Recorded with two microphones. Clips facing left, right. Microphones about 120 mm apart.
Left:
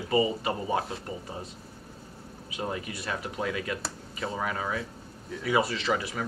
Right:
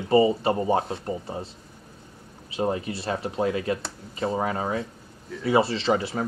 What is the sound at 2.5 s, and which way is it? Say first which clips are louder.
Speech: right 7 dB; 30° right (ahead or behind).